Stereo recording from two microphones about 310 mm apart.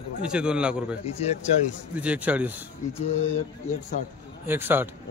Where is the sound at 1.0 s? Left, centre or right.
Centre.